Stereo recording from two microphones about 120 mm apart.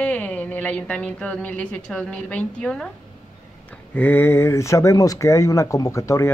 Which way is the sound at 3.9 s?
15° left (ahead or behind).